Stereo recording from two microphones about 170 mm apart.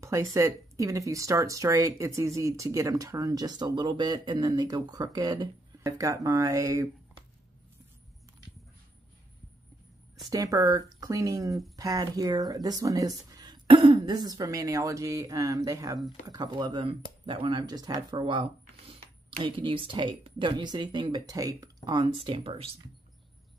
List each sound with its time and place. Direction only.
0.0 s speech: 20° right (ahead or behind)
10.3 s speech: 20° right (ahead or behind)